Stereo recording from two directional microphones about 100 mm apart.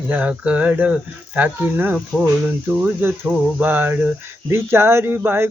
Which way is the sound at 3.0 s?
20° right (ahead or behind).